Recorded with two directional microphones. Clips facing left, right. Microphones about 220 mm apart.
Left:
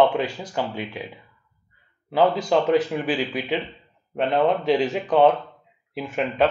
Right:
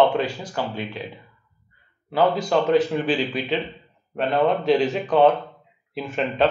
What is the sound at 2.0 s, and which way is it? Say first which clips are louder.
A man's voice: left 1 dB; 15° left (ahead or behind).